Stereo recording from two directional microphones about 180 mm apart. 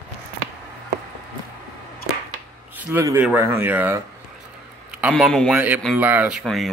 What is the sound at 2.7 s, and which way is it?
Speech, 15° right (ahead or behind).